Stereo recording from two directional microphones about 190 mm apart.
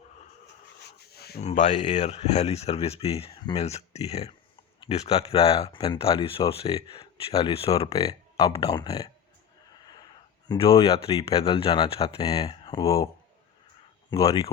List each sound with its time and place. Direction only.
0.9 s a sound: 55° left (ahead or behind)
1.4 s speech: 35° left (ahead or behind)
7.9 s speech: 20° left (ahead or behind)
10.5 s speech: 30° left (ahead or behind)
12.2 s speech: 20° left (ahead or behind)
14.1 s speech: 15° left (ahead or behind)